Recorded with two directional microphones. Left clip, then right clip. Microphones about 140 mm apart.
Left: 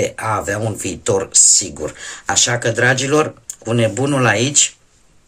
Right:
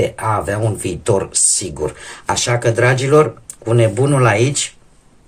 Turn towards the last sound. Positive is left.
turn(degrees=20)  # may be behind; listen again after turning